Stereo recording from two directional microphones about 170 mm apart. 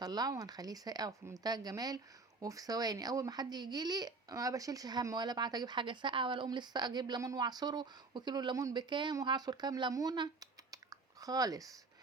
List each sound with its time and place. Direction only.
0.0 s speech: 20° right (ahead or behind)